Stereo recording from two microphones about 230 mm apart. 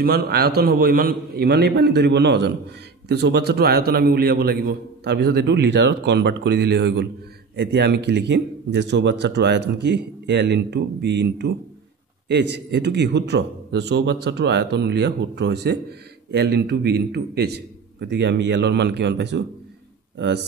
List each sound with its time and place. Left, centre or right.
0.0 s a man's voice: right